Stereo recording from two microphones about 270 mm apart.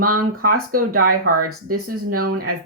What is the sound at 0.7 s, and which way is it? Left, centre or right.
Speech, right.